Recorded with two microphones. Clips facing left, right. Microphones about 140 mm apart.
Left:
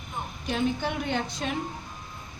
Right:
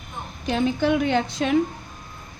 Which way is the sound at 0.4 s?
90° right.